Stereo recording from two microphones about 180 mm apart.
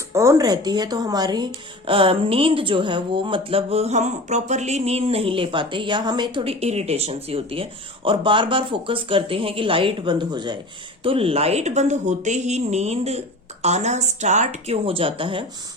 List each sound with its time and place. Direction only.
0.1 s speech: 15° right (ahead or behind)